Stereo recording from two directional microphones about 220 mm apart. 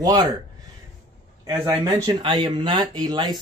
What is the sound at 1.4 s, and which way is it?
Speech, 15° right (ahead or behind).